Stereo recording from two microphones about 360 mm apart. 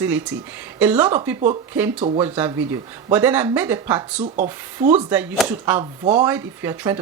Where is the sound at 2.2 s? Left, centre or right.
Centre.